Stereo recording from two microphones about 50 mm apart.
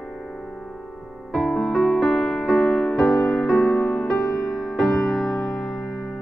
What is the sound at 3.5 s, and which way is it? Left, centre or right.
Music, left.